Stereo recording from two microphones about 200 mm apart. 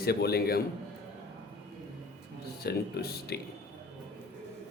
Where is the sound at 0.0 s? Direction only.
50° left (ahead or behind).